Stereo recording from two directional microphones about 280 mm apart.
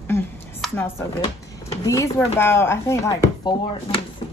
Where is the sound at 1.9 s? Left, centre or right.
Centre.